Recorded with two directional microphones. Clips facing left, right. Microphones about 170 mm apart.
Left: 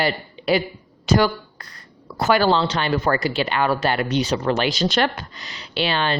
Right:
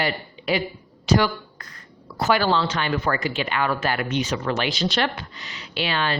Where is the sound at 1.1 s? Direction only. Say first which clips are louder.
Left 2 dB; 40° left (ahead or behind).